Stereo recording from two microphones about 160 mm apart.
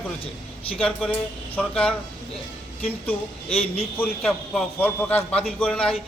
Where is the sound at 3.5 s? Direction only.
35° left (ahead or behind).